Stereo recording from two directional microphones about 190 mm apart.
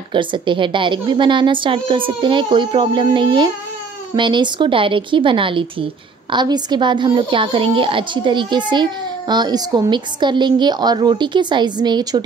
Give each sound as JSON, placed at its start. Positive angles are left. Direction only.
{"t": 0.1, "sound": "a woman's voice", "side_deg": -25}